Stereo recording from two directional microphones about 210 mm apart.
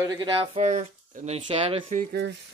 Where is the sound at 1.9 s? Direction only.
40° right (ahead or behind).